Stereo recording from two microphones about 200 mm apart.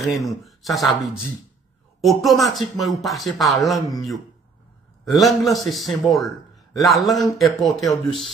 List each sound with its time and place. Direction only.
0.0 s a man's voice: centre (ahead or behind)
5.0 s a man's voice: centre (ahead or behind)
7.9 s speech: 25° left (ahead or behind)